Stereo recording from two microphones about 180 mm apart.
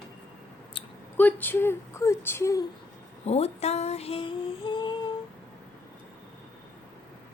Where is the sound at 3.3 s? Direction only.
35° left (ahead or behind).